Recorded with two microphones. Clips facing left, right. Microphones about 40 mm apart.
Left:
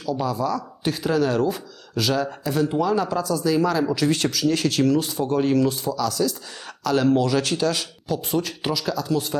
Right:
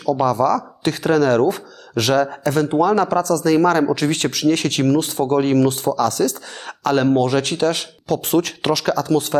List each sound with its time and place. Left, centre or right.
0.0 s speech: right
8.0 s speech: right